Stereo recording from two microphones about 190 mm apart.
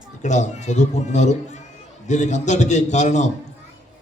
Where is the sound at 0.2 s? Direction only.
40° left (ahead or behind).